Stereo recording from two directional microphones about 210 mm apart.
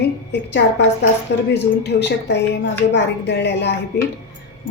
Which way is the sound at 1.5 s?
55° left (ahead or behind).